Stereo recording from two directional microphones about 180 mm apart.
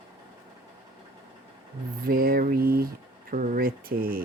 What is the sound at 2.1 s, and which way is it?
Speech, 55° right (ahead or behind).